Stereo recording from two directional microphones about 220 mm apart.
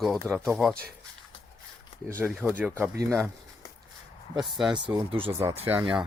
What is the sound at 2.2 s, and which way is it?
Speech, 5° right (ahead or behind).